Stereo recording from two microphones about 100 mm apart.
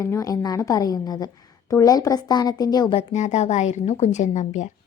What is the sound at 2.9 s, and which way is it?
A woman's voice, 80° left.